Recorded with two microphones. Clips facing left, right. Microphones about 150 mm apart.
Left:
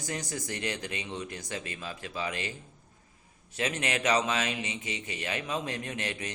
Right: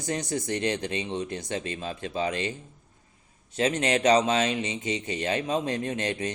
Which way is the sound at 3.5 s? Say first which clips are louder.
Right 7 dB; 30° right (ahead or behind).